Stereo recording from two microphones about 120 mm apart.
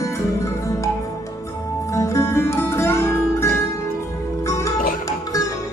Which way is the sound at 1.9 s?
25° left (ahead or behind).